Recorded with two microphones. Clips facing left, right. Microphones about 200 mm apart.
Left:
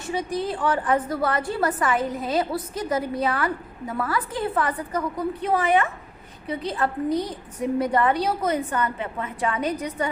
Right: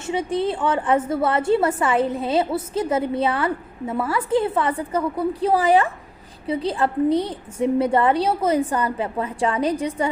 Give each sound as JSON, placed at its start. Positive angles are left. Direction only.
{"t": 0.0, "sound": "a woman's voice", "side_deg": -25}